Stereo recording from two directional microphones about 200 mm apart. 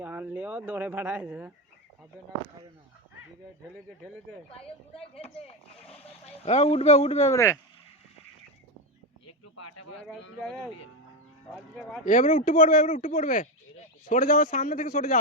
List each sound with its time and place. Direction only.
0.0 s speech: 10° right (ahead or behind)
4.5 s speech: 30° left (ahead or behind)
7.3 s speech: 15° left (ahead or behind)
10.0 s speech: 5° left (ahead or behind)
12.0 s speech: 40° left (ahead or behind)